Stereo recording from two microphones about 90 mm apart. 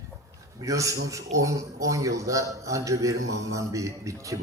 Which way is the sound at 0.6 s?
40° right (ahead or behind).